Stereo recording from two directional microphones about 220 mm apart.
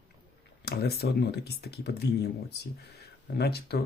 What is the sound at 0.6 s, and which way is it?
Speech, 45° left (ahead or behind).